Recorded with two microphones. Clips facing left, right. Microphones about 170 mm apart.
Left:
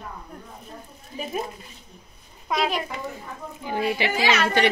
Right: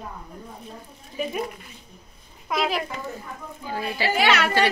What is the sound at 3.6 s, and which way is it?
Speech, 20° left (ahead or behind).